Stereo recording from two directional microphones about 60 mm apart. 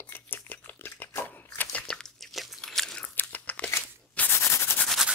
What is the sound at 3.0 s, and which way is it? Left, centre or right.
Crunch, left.